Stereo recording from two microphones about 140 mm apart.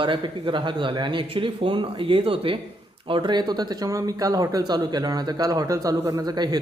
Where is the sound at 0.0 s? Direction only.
35° right (ahead or behind).